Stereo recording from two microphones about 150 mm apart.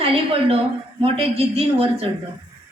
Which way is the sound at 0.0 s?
40° right (ahead or behind).